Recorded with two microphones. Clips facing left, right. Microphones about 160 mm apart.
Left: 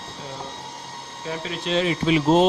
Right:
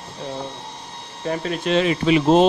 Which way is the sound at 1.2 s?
50° right (ahead or behind).